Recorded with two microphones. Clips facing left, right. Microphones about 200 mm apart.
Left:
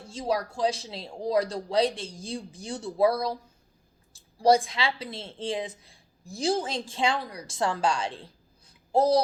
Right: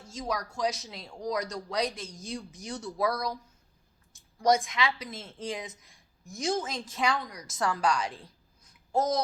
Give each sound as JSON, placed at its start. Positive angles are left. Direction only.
{"t": 0.0, "sound": "speech", "side_deg": 30}